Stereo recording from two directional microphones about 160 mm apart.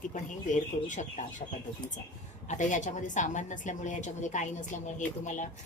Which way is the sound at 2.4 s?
50° left (ahead or behind).